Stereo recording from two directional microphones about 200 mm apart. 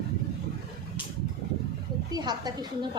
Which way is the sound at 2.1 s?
20° right (ahead or behind).